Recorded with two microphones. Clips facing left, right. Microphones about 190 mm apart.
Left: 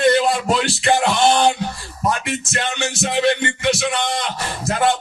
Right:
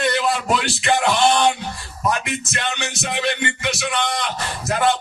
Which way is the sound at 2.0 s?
30° left (ahead or behind).